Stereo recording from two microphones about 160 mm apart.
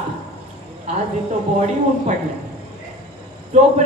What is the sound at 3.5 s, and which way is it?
Speech, 45° right (ahead or behind).